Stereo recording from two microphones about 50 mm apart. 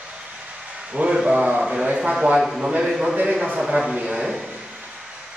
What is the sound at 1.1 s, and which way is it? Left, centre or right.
A man's voice, centre.